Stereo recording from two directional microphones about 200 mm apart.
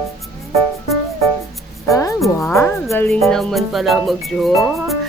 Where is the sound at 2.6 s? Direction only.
15° left (ahead or behind).